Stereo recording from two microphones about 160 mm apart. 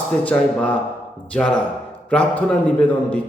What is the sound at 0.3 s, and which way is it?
A man's voice, 10° left (ahead or behind).